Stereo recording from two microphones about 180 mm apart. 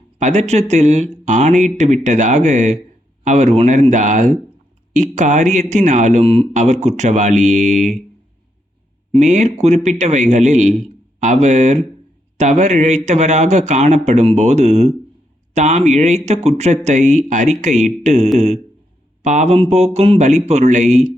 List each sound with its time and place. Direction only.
0.2 s speech: 40° right (ahead or behind)
9.1 s speech: 40° right (ahead or behind)